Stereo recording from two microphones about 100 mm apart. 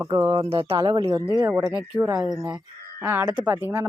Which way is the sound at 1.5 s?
20° right (ahead or behind).